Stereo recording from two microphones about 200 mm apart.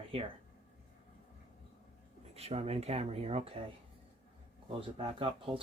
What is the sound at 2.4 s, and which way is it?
Speech, 30° right (ahead or behind).